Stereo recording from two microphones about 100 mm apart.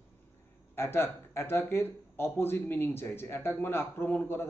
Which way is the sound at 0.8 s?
25° left (ahead or behind).